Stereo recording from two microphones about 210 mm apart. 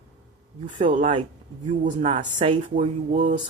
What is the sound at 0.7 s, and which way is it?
Speech, 25° right (ahead or behind).